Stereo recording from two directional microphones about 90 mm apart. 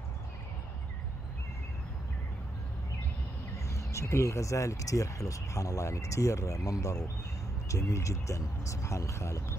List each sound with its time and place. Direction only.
3.5 s speech: 35° left (ahead or behind)